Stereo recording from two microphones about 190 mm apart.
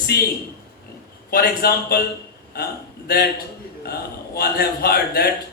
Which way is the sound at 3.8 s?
55° left (ahead or behind).